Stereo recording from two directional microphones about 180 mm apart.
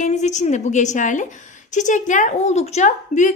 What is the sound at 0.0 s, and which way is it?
A woman's voice, 40° left (ahead or behind).